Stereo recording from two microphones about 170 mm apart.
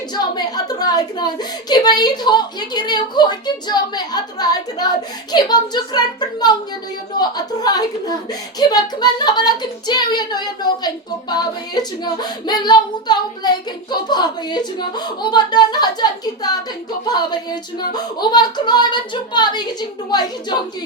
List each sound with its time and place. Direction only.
0.1 s speech: 25° left (ahead or behind)